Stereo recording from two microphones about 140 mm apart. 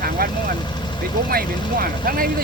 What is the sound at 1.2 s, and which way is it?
Speech, 90° right.